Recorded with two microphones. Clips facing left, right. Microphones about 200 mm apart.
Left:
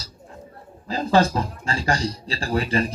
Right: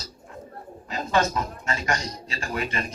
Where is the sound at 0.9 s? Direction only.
30° left (ahead or behind).